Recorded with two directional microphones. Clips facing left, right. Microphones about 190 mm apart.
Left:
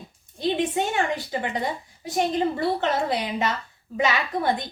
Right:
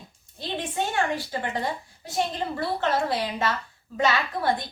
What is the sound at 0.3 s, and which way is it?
A woman's voice, 15° left (ahead or behind).